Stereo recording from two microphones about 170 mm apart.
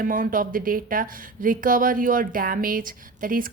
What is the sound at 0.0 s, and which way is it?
A woman's voice, 55° right (ahead or behind).